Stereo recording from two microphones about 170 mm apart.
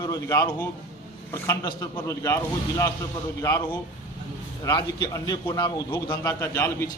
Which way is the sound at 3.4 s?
20° left (ahead or behind).